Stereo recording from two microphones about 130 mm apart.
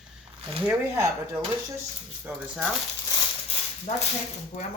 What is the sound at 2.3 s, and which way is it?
Speech, 20° right (ahead or behind).